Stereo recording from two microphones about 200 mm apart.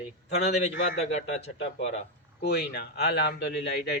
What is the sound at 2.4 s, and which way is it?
Speech, 55° left (ahead or behind).